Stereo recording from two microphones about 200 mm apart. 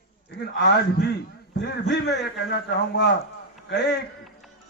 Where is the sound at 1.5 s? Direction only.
60° left (ahead or behind).